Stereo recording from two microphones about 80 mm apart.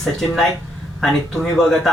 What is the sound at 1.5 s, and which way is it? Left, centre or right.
Speech, centre.